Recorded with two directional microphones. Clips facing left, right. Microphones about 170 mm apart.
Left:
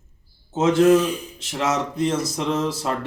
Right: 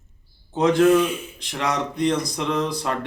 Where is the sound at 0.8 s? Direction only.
35° left (ahead or behind).